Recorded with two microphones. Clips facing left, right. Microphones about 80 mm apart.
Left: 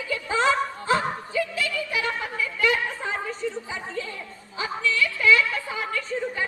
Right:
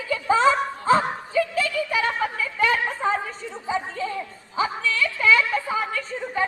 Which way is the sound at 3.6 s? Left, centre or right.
Right.